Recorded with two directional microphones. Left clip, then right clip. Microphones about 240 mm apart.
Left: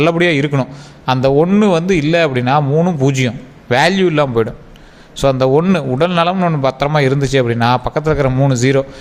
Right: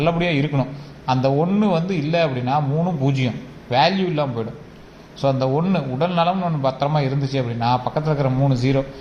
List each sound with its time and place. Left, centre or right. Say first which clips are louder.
0.0 s a man's voice: left 7 dB; left